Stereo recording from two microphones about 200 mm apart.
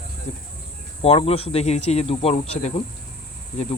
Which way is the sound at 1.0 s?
30° left (ahead or behind).